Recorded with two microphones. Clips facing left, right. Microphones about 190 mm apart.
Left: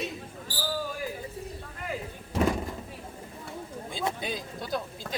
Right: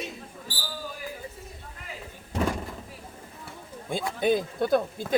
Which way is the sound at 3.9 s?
55° right (ahead or behind).